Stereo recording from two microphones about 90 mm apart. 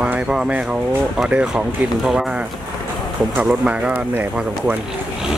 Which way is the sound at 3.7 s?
15° right (ahead or behind).